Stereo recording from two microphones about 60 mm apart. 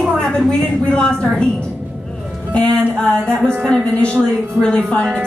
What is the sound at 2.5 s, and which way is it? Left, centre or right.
A woman's voice, centre.